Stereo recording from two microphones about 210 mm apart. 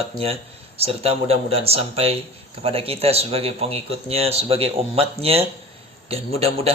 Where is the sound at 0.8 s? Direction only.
30° right (ahead or behind).